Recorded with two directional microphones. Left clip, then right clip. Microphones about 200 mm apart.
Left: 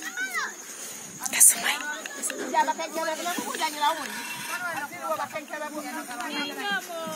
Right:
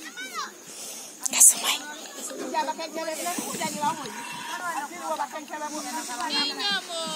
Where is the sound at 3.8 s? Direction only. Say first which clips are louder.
Left 2 dB; 20° left (ahead or behind); by 6.3 s 45° left (ahead or behind).